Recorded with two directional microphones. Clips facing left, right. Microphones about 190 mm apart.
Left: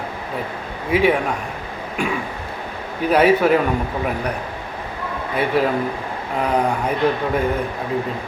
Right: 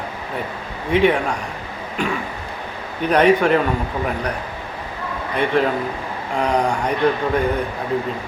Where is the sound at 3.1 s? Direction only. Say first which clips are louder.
Even; 5° left (ahead or behind).